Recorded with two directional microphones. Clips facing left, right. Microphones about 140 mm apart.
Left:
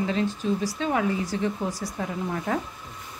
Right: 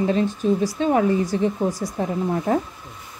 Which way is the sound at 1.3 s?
20° right (ahead or behind).